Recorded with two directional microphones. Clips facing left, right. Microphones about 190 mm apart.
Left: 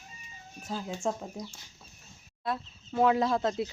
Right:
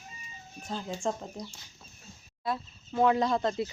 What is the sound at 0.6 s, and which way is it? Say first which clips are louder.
Speech: even; 5° left (ahead or behind).